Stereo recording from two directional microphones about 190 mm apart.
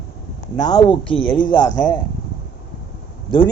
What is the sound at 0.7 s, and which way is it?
Speech, 25° left (ahead or behind).